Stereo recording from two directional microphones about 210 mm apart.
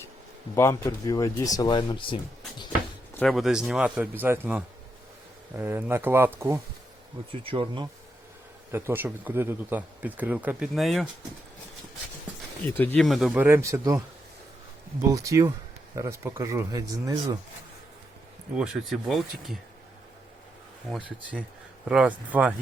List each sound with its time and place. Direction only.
0.5 s speech: 10° left (ahead or behind)
3.2 s speech: centre (ahead or behind)
7.4 s speech: 25° right (ahead or behind)
8.7 s speech: 10° right (ahead or behind)
12.6 s speech: 10° left (ahead or behind); by 14.0 s 15° right (ahead or behind)
15.1 s speech: 15° right (ahead or behind)
18.5 s speech: 5° right (ahead or behind)
20.9 s speech: centre (ahead or behind)